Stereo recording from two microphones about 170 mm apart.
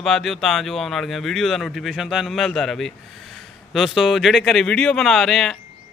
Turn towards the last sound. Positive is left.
turn(degrees=0)  # may be behind; listen again after turning